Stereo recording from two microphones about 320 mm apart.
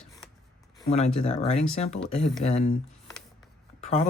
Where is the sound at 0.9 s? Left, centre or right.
Centre.